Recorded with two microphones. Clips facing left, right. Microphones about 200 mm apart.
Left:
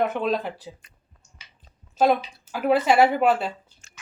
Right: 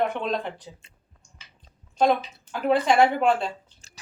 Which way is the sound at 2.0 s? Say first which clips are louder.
Left 1 dB; 5° left (ahead or behind).